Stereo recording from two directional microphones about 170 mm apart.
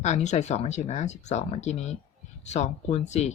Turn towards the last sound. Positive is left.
turn(degrees=40)  # may be behind; listen again after turning